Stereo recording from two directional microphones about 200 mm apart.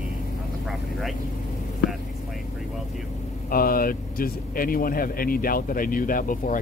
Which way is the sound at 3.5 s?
45° left (ahead or behind).